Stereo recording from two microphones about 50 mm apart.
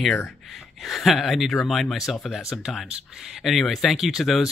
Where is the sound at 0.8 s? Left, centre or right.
Centre.